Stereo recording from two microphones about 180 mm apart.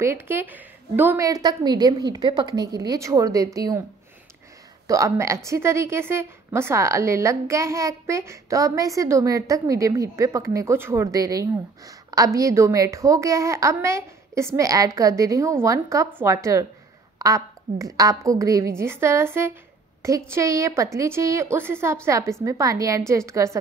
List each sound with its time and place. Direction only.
0.0 s a woman's voice: 15° right (ahead or behind)
4.8 s a woman's voice: 20° right (ahead or behind)